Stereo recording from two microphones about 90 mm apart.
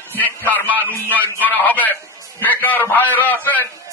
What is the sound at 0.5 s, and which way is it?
A man's voice, 20° left (ahead or behind).